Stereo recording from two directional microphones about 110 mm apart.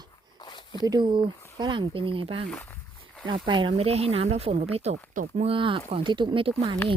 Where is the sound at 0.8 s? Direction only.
40° right (ahead or behind).